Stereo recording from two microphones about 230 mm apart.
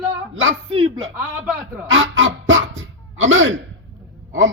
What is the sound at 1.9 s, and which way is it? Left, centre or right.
Honk, right.